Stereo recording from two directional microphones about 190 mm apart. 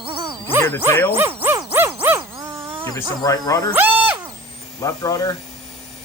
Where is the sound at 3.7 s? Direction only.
10° right (ahead or behind).